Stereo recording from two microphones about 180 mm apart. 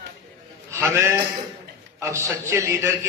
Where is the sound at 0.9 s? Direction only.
15° right (ahead or behind).